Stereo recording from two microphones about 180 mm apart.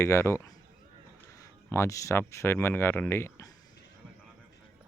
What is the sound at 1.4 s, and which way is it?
Speech, 15° left (ahead or behind).